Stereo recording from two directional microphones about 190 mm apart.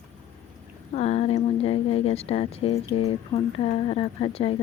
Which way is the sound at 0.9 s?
35° left (ahead or behind).